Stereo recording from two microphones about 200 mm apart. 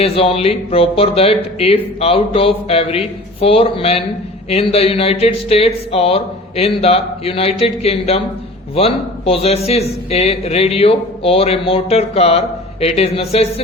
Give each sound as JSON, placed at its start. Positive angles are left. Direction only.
{"t": 0.0, "sound": "a man's voice", "side_deg": 30}